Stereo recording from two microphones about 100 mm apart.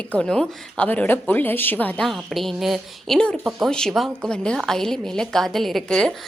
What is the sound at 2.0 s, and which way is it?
A woman's voice, centre (ahead or behind).